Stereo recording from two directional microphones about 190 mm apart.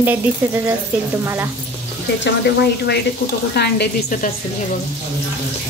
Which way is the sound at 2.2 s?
60° left (ahead or behind).